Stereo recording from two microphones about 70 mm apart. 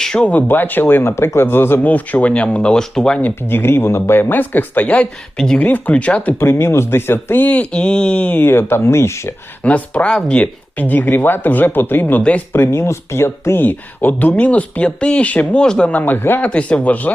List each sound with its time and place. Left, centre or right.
0.0 s speech: centre
3.4 s speech: left; by 6.3 s centre
6.4 s speech: left
8.4 s speech: left
9.6 s speech: centre
12.5 s speech: left
16.5 s speech: centre